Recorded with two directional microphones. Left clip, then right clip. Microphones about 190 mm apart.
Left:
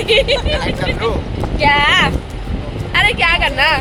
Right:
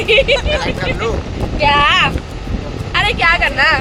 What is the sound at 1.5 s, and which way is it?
Speech, 10° right (ahead or behind).